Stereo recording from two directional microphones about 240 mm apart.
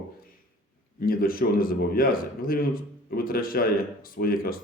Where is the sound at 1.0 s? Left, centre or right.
Left.